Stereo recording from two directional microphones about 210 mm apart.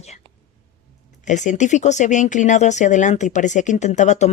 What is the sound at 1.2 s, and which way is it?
Speech, 35° left (ahead or behind).